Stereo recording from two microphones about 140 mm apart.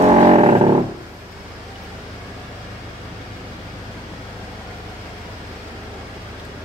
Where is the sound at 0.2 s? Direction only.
45° right (ahead or behind).